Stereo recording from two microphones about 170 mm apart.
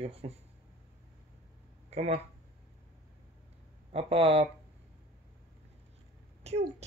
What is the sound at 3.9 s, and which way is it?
Speech, 35° right (ahead or behind).